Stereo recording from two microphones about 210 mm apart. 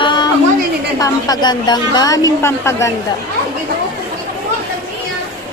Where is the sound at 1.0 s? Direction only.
20° left (ahead or behind).